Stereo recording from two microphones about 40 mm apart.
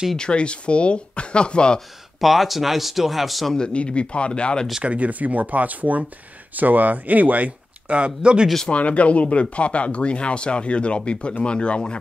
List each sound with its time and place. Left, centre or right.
0.2 s speech: left
2.1 s speech: centre
3.5 s speech: left
4.8 s speech: right
7.9 s speech: right
8.6 s speech: left